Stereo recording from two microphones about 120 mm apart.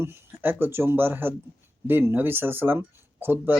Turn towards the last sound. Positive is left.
turn(degrees=-15)  # may be behind; listen again after turning